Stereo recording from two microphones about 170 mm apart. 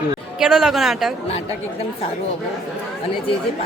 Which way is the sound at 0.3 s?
Centre (ahead or behind).